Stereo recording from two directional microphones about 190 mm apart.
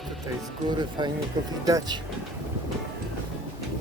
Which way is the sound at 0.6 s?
25° right (ahead or behind).